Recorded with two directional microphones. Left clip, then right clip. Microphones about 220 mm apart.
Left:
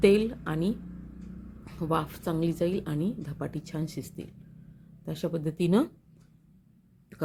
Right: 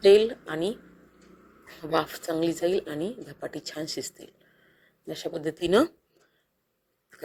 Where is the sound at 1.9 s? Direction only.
20° right (ahead or behind).